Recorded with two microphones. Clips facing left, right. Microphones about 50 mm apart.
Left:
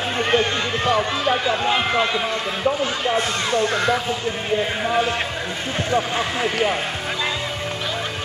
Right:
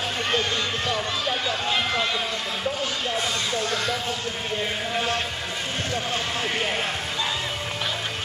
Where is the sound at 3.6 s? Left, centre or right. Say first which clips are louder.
Left 7 dB; left.